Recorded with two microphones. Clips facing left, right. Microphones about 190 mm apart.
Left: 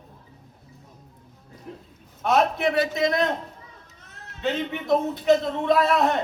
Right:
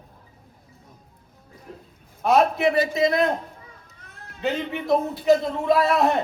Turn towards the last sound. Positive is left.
turn(degrees=0)  # may be behind; listen again after turning